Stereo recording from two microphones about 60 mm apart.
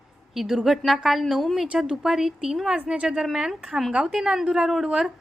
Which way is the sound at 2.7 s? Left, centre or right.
Centre.